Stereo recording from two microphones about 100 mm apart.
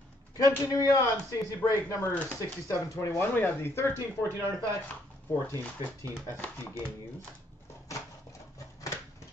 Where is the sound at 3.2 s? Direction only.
20° left (ahead or behind).